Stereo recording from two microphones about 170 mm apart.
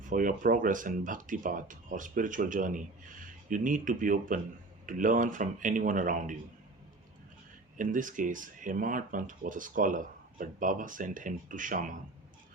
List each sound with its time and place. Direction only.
0.0 s speech: 50° right (ahead or behind)
7.8 s speech: 50° right (ahead or behind)